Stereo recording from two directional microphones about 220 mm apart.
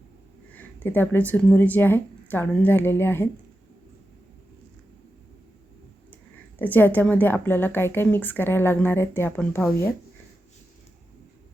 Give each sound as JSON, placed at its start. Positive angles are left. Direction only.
{"t": 0.5, "sound": "a woman's voice", "side_deg": 10}
{"t": 6.6, "sound": "a woman's voice", "side_deg": 10}